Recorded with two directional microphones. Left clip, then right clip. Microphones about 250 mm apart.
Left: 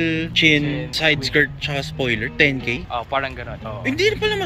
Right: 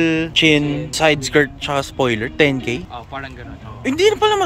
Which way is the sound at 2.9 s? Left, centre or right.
Centre.